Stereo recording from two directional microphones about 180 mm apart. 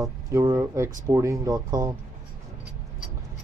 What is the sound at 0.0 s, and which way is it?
Speech, 15° right (ahead or behind).